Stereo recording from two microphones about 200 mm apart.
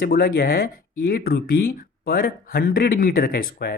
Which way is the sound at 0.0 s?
50° left (ahead or behind).